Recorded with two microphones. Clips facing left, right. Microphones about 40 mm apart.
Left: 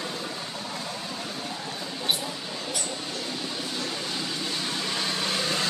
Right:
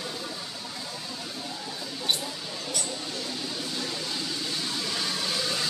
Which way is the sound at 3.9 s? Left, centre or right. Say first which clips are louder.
Left 1 dB; left.